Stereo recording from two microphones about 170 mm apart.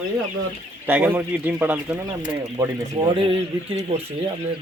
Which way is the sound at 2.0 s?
25° right (ahead or behind).